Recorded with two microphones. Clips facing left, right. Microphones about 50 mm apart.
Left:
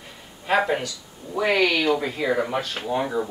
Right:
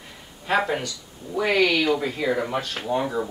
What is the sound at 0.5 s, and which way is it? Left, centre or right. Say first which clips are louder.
Speech: left 1 dB; centre.